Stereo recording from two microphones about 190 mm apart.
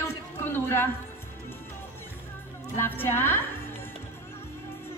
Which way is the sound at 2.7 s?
10° left (ahead or behind).